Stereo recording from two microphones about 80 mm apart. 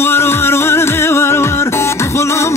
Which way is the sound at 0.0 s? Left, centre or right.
Left.